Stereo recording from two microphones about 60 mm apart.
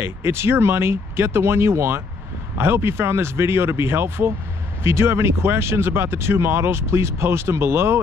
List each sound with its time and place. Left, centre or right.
0.0 s speech: right